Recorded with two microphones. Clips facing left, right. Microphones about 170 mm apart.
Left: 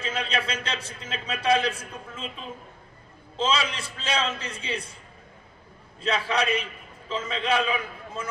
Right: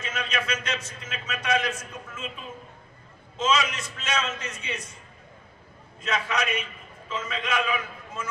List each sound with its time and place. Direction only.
0.0 s a man's voice: 30° left (ahead or behind)
5.9 s a man's voice: 30° left (ahead or behind)